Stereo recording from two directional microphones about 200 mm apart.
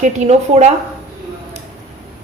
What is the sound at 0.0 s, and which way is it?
Speech, 35° right (ahead or behind).